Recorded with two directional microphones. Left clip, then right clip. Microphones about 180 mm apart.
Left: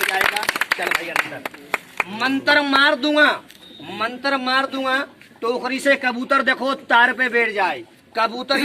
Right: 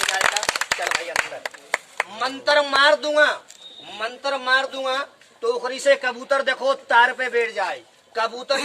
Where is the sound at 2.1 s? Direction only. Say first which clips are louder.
Left 2 dB; 15° right (ahead or behind).